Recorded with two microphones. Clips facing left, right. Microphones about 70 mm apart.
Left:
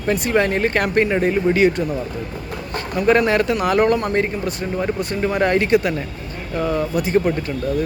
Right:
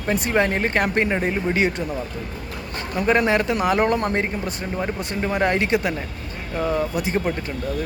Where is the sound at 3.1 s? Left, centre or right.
Centre.